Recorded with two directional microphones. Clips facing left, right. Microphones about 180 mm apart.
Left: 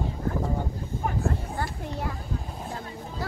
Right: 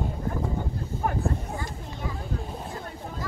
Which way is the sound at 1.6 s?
70° left (ahead or behind).